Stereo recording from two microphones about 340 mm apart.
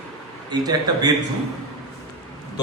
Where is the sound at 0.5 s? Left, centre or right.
Centre.